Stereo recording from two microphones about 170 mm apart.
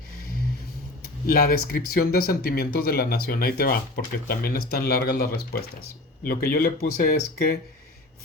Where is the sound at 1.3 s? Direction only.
60° left (ahead or behind).